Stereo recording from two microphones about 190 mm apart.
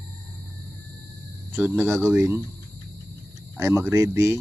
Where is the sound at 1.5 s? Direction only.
5° right (ahead or behind).